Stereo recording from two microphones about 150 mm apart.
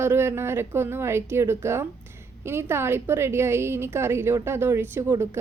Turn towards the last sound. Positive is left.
turn(degrees=-15)  # may be behind; listen again after turning